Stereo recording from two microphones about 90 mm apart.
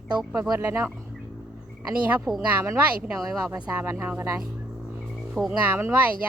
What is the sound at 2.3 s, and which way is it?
Speech, 5° right (ahead or behind).